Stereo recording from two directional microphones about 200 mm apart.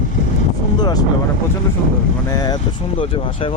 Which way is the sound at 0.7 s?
20° left (ahead or behind).